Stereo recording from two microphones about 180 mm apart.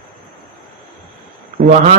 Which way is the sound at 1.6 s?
40° right (ahead or behind).